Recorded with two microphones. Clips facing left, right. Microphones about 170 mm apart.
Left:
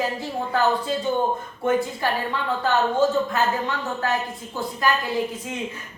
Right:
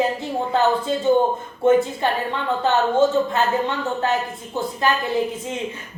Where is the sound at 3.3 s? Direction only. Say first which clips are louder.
Right 3 dB; 25° right (ahead or behind).